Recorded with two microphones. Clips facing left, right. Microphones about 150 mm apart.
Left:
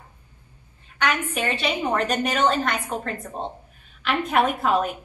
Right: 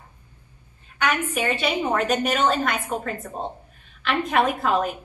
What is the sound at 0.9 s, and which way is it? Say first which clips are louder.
A woman's voice: right 1 dB; 10° right (ahead or behind).